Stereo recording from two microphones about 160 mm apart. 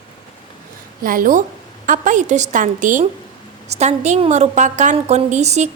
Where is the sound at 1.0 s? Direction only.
60° right (ahead or behind).